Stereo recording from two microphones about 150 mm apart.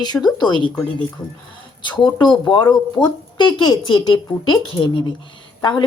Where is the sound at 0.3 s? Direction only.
30° left (ahead or behind).